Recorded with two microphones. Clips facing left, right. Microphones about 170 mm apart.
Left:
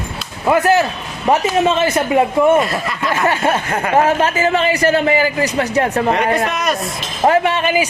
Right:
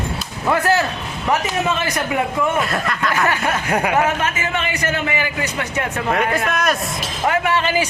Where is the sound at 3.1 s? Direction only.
25° left (ahead or behind).